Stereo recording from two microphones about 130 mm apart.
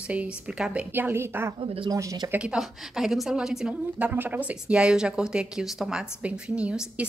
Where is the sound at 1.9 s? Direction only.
30° right (ahead or behind).